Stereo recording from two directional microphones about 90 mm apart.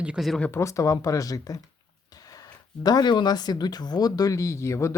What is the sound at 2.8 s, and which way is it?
Speech, 50° left (ahead or behind).